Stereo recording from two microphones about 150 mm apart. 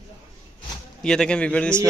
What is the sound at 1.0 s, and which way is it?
Speech, 5° left (ahead or behind).